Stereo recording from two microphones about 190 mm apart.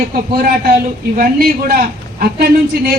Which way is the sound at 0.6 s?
50° right (ahead or behind).